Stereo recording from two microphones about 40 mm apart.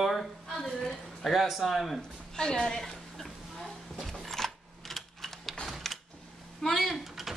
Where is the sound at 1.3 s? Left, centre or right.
Centre.